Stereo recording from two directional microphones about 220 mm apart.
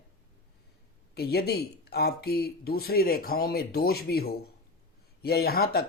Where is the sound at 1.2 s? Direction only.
45° left (ahead or behind).